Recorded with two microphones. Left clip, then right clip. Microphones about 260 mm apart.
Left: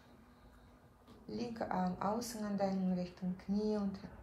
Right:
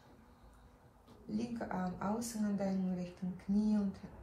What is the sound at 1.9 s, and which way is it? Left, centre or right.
A woman's voice, left.